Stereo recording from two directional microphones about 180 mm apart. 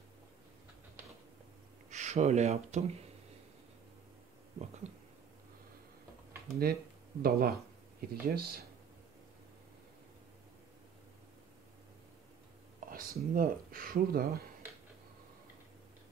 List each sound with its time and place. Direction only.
1.9 s speech: 40° right (ahead or behind)
6.6 s speech: 55° right (ahead or behind)
12.8 s speech: 50° right (ahead or behind)